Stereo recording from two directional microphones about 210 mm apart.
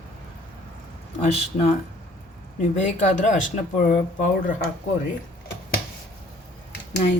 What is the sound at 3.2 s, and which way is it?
Speech, 35° left (ahead or behind).